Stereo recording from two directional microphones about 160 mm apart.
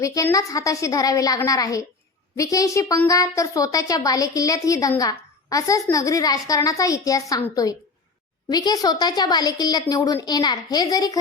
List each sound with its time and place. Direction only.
0.0 s a woman's voice: 20° left (ahead or behind)